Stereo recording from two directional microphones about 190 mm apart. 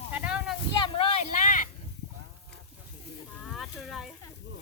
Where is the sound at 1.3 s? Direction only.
45° left (ahead or behind).